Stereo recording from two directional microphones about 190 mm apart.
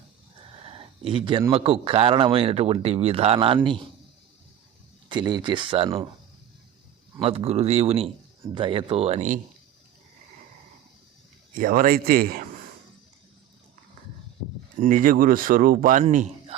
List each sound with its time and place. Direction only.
0.7 s speech: 25° right (ahead or behind)
5.0 s speech: 25° right (ahead or behind)
7.2 s speech: 30° right (ahead or behind)
11.5 s speech: 45° right (ahead or behind)
14.8 s speech: 45° right (ahead or behind)
16.0 s a man's voice: 35° right (ahead or behind)